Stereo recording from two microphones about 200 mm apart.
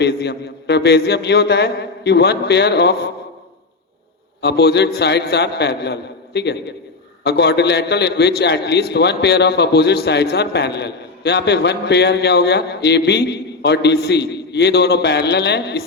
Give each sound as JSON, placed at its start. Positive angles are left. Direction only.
{"t": 0.0, "sound": "a man's voice", "side_deg": 60}
{"t": 4.4, "sound": "a man's voice", "side_deg": 55}